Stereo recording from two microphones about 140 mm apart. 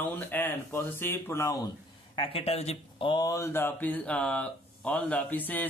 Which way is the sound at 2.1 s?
45° left (ahead or behind).